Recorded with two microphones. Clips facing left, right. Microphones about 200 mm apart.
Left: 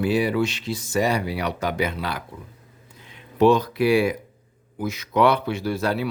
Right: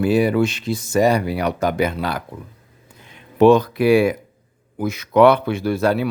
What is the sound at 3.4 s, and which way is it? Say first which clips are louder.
Speech: right 5 dB; 55° right (ahead or behind).